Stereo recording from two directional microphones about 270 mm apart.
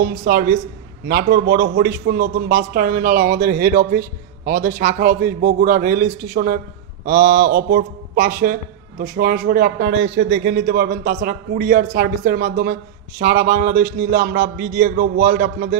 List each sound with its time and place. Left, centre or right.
0.0 s speech: right